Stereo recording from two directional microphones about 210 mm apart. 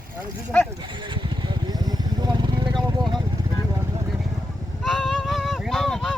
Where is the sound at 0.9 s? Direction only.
25° right (ahead or behind).